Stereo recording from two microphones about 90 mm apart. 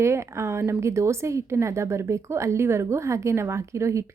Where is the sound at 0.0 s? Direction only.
30° right (ahead or behind).